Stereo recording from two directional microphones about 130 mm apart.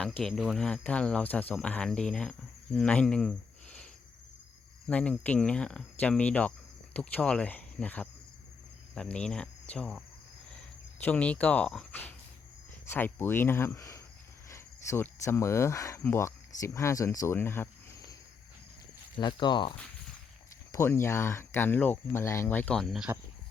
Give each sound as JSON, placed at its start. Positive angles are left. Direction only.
{"t": 0.2, "sound": "cricket", "side_deg": 0}
{"t": 2.7, "sound": "speech", "side_deg": 5}
{"t": 4.9, "sound": "cricket", "side_deg": 10}
{"t": 11.0, "sound": "cricket", "side_deg": 10}
{"t": 14.5, "sound": "speech", "side_deg": 20}
{"t": 19.1, "sound": "speech", "side_deg": 35}
{"t": 20.7, "sound": "speech", "side_deg": 20}